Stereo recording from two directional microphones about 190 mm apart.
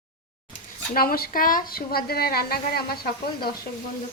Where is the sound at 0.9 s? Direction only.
50° left (ahead or behind).